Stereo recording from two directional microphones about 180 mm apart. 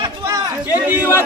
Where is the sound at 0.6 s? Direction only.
10° right (ahead or behind).